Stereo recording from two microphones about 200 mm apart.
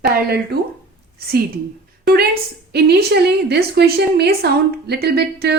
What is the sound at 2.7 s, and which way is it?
A woman's voice, 55° right (ahead or behind).